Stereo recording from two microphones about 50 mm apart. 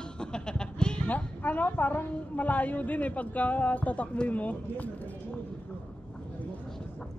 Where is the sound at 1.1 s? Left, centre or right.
Left.